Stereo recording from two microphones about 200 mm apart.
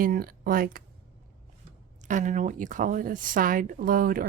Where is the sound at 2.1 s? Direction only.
40° right (ahead or behind).